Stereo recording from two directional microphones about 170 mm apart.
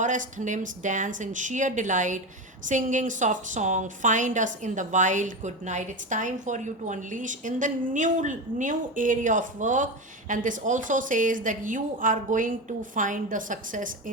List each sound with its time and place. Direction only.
0.0 s a woman's voice: 50° right (ahead or behind)